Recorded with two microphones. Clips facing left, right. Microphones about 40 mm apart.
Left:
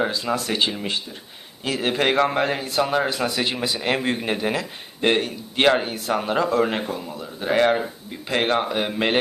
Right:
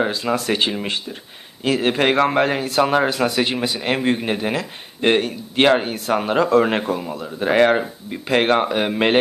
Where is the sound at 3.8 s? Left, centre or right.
Centre.